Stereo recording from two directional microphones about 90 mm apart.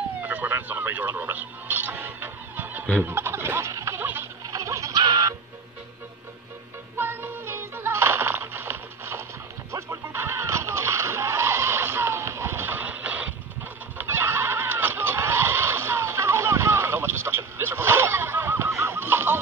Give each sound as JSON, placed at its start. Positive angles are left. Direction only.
{"t": 0.2, "sound": "radio", "side_deg": -20}
{"t": 3.0, "sound": "turkey", "side_deg": -25}
{"t": 4.5, "sound": "a sound", "side_deg": -35}
{"t": 4.9, "sound": "music", "side_deg": -50}
{"t": 7.0, "sound": "music", "side_deg": -25}
{"t": 13.9, "sound": "a sound", "side_deg": -25}